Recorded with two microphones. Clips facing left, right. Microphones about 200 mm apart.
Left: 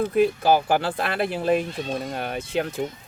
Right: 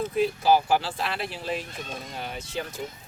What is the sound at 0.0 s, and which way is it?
Speech, 55° left (ahead or behind).